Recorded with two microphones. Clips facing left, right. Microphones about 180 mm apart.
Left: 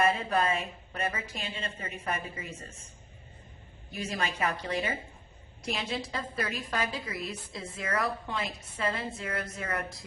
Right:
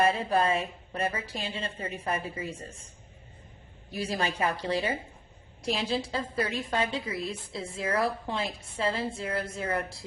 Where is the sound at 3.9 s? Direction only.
35° right (ahead or behind).